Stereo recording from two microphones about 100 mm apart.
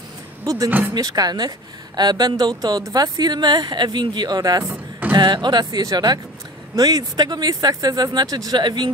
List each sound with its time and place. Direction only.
0.7 s speech: 20° right (ahead or behind)
0.9 s speech: 40° right (ahead or behind)